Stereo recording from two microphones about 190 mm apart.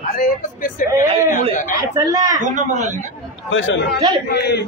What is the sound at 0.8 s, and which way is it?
Speech, 45° left (ahead or behind).